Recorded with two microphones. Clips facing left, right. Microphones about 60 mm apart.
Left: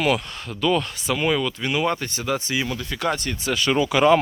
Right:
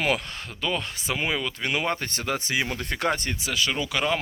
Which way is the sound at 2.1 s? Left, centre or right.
Right.